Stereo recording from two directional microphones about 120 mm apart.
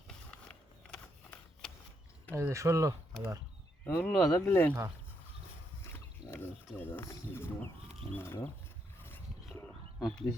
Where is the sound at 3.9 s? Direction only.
20° left (ahead or behind).